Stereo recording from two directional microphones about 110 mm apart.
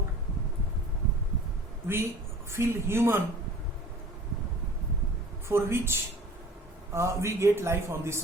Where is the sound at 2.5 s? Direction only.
25° right (ahead or behind).